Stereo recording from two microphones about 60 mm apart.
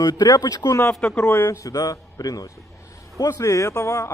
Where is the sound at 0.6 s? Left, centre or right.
Left.